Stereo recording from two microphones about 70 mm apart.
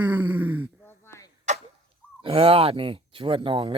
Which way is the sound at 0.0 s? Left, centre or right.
Right.